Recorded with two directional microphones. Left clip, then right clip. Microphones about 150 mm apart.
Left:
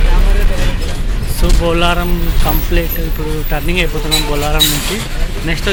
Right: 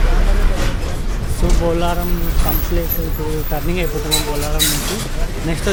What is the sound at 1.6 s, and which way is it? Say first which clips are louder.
Speech: left 5 dB; 5° left (ahead or behind).